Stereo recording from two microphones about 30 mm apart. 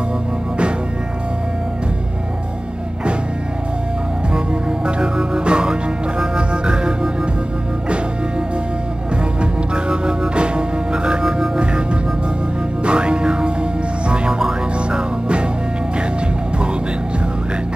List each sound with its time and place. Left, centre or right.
4.8 s music: right
9.4 s music: right
12.8 s music: right